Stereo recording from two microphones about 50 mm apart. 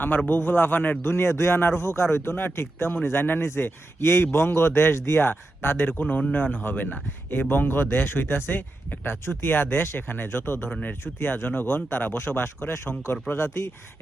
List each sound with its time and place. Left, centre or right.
0.3 s speech: left
1.0 s speech: left
1.5 s speech: left
5.2 s speech: left
10.8 s speech: left
12.6 s speech: left
13.2 s speech: left